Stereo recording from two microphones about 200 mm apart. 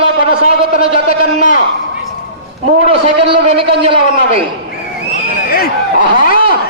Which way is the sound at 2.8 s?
30° right (ahead or behind).